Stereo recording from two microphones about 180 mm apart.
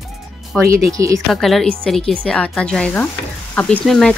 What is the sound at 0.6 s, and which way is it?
Speech, 15° right (ahead or behind).